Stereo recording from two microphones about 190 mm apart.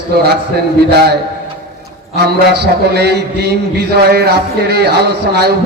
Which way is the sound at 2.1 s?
60° right (ahead or behind).